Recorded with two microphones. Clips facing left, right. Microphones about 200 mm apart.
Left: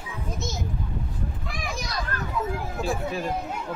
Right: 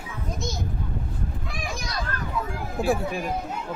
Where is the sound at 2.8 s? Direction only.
30° right (ahead or behind).